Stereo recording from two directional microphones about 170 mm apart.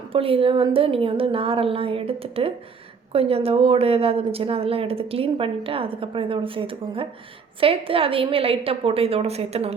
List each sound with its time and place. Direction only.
0.1 s speech: 35° right (ahead or behind)